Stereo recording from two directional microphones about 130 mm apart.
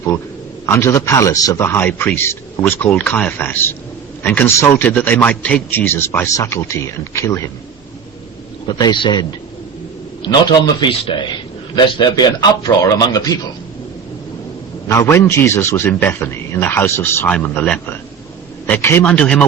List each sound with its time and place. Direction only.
0.6 s a man's voice: 20° left (ahead or behind)
8.6 s a man's voice: 35° left (ahead or behind)
10.2 s a man's voice: 35° left (ahead or behind)
14.8 s a man's voice: 20° left (ahead or behind)